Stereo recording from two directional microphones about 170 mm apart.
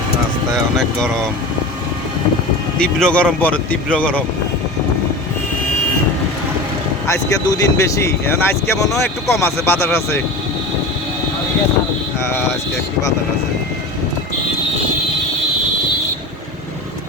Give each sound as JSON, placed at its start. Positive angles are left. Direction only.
{"t": 0.8, "sound": "speech", "side_deg": 5}
{"t": 2.7, "sound": "speech", "side_deg": 5}
{"t": 7.1, "sound": "speech", "side_deg": 20}